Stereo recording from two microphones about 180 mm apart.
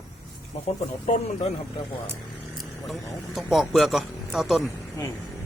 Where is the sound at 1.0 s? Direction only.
35° left (ahead or behind).